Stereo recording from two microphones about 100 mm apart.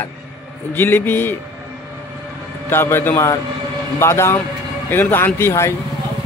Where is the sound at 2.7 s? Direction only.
25° left (ahead or behind).